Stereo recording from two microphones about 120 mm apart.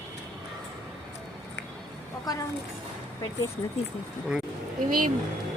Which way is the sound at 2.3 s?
30° left (ahead or behind).